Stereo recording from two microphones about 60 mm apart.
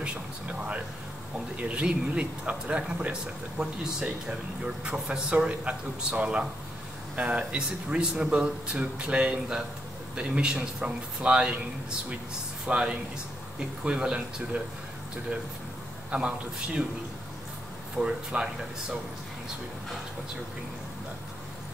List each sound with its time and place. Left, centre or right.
0.0 s a sound: centre
1.6 s speech: right
12.6 s speech: centre
16.1 s speech: centre
17.9 s speech: centre